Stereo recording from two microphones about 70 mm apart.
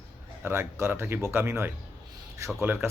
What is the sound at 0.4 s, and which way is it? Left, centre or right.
Speech, right.